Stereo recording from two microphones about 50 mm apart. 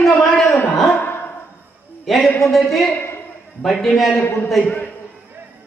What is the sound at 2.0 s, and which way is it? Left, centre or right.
A woman's voice, centre.